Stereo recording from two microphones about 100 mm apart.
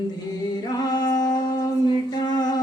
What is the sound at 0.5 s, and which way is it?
Music, 40° left (ahead or behind).